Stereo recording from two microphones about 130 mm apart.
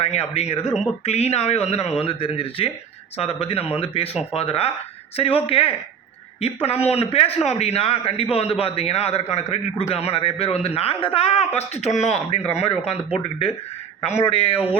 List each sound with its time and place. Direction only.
0.0 s a man's voice: 50° left (ahead or behind)
14.0 s a man's voice: 55° left (ahead or behind)